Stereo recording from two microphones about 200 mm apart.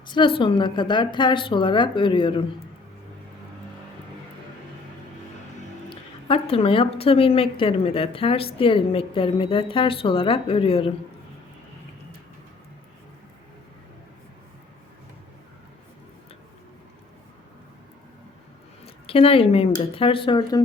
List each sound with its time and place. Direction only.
0.1 s a woman's voice: 25° left (ahead or behind)
5.9 s a woman's voice: 25° left (ahead or behind)
19.0 s a woman's voice: 30° left (ahead or behind)